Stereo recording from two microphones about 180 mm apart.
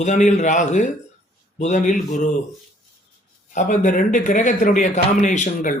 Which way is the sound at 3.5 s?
45° left (ahead or behind).